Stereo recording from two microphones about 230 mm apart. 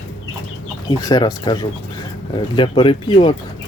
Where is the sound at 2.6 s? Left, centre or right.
Left.